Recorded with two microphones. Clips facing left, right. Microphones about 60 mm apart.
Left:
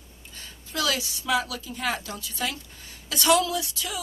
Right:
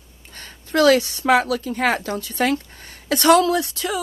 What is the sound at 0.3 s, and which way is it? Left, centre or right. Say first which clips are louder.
Speech: right 13 dB; right.